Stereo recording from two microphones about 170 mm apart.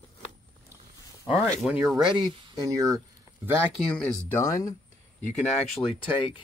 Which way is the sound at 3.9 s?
5° left (ahead or behind).